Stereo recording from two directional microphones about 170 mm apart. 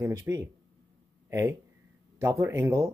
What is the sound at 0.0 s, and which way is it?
Speech, 20° right (ahead or behind).